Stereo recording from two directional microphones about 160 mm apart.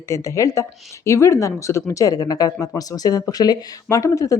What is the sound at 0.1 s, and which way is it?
Speech, 20° left (ahead or behind).